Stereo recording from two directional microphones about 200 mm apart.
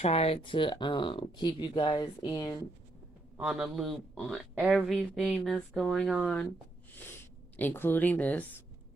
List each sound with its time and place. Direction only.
0.0 s speech: 30° left (ahead or behind)
3.3 s speech: 5° right (ahead or behind)